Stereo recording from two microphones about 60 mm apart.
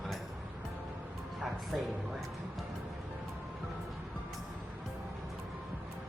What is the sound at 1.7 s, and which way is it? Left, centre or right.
Speech, centre.